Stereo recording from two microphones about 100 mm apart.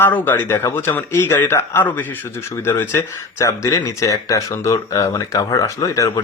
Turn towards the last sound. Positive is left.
turn(degrees=30)  # may be behind; listen again after turning